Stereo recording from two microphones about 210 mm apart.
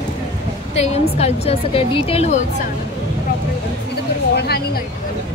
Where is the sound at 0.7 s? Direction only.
30° left (ahead or behind).